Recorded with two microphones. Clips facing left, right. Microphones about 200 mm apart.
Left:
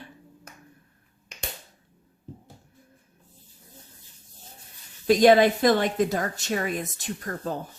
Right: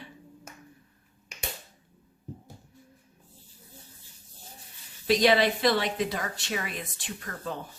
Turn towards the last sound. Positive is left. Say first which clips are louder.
# left 5 dB
turn(degrees=40)  # may be behind; listen again after turning